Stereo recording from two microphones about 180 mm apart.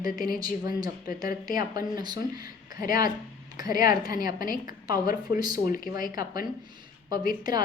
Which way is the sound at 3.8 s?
20° right (ahead or behind).